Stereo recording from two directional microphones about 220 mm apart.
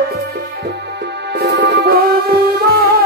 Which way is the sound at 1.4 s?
50° right (ahead or behind).